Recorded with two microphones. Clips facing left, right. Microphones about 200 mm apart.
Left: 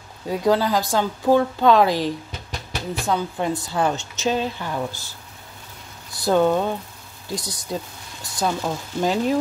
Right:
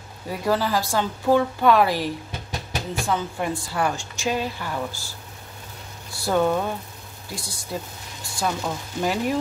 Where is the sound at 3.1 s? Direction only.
20° left (ahead or behind).